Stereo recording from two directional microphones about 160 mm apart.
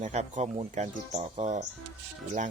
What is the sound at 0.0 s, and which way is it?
Speech, 50° right (ahead or behind).